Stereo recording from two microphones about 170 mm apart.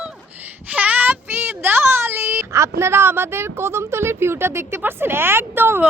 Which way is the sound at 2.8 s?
15° right (ahead or behind).